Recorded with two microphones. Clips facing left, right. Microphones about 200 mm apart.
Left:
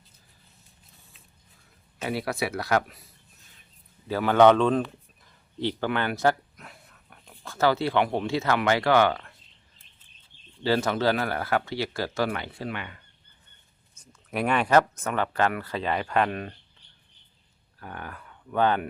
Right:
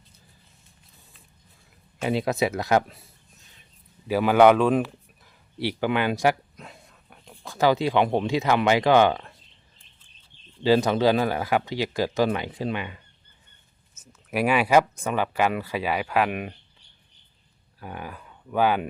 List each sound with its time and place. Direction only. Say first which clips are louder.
2.0 s speech: right 5 dB; 20° right (ahead or behind)
4.1 s speech: right 1 dB; 10° right (ahead or behind)
6.6 s a sound: right 4 dB; 25° right (ahead or behind)
10.6 s speech: right 5 dB; 15° right (ahead or behind)
13.9 s speech: right 3 dB; 5° right (ahead or behind)
17.7 s speech: right 3 dB; 15° right (ahead or behind)